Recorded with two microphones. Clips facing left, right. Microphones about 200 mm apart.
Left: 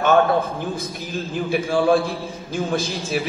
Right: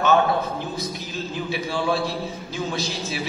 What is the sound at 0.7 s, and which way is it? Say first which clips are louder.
A man's voice: left 2 dB; 50° left (ahead or behind).